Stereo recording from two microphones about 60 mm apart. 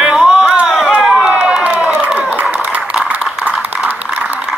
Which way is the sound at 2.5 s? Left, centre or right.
Right.